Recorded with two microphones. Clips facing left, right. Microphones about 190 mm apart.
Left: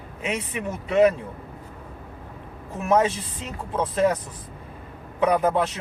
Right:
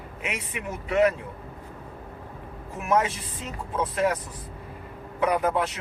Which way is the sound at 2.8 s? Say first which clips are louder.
Left 4 dB; 25° left (ahead or behind).